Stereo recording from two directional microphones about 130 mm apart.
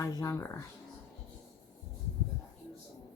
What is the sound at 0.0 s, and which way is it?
Speech, 25° left (ahead or behind).